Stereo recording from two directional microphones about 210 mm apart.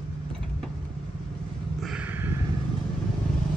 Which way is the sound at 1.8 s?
5° right (ahead or behind).